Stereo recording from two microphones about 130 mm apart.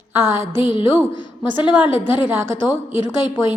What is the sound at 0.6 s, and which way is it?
Speech, 40° left (ahead or behind).